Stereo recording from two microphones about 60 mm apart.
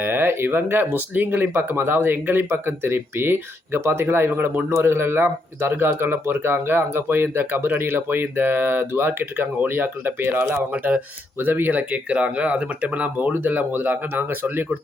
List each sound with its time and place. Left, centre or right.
0.0 s speech: right
4.7 s speech: right
11.3 s speech: right